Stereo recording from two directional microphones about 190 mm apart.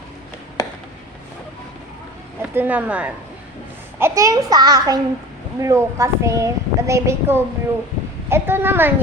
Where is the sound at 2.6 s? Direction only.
10° right (ahead or behind).